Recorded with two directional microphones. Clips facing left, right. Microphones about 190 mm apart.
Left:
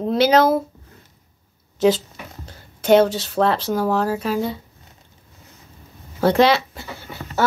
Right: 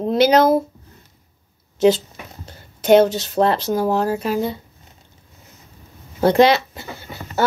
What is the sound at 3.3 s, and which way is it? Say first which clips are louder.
Speech: right 2 dB; 25° right (ahead or behind).